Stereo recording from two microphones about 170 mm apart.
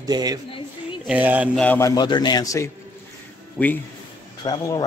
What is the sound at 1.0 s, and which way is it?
Speech, 10° right (ahead or behind).